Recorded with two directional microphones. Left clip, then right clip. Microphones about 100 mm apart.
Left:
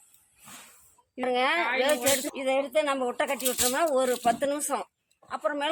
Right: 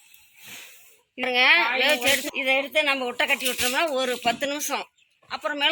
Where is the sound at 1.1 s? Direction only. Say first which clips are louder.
Right 7 dB; 25° left (ahead or behind).